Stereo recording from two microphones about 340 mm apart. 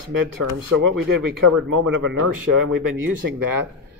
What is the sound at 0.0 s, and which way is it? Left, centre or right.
Speech, right.